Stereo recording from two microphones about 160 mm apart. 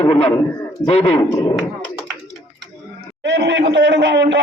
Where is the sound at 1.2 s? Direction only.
20° left (ahead or behind).